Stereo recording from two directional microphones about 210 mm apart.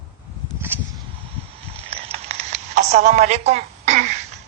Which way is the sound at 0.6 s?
10° right (ahead or behind).